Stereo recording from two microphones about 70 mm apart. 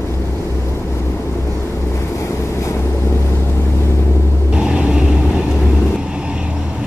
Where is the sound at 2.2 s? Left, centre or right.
Left.